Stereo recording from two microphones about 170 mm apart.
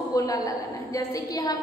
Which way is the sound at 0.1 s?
20° left (ahead or behind).